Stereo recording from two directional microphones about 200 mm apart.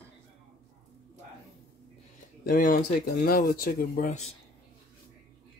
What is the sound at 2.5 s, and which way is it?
Speech, 45° left (ahead or behind).